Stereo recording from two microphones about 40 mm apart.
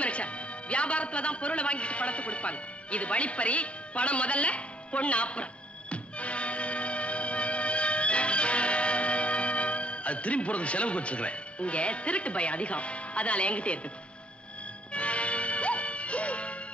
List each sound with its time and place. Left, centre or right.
0.0 s a man's voice: left
14.9 s music: left